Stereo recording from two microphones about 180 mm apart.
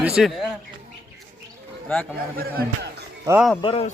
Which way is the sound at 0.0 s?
5° right (ahead or behind).